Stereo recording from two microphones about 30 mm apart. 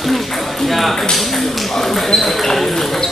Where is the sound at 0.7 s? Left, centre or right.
Centre.